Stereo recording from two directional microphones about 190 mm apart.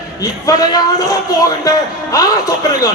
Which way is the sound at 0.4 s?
20° left (ahead or behind).